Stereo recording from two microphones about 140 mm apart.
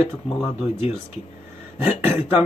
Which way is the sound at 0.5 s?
50° left (ahead or behind).